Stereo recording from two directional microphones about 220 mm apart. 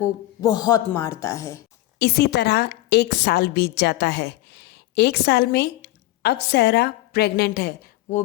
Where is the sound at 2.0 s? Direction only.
50° left (ahead or behind).